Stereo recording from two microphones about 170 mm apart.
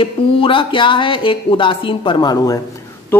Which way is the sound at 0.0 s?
30° left (ahead or behind).